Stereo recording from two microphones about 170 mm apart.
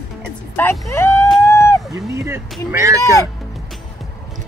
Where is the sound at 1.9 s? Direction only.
15° right (ahead or behind).